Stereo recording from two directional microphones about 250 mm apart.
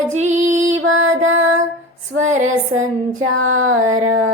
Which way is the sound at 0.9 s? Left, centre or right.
Right.